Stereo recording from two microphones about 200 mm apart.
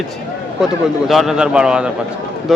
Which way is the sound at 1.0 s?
Centre (ahead or behind).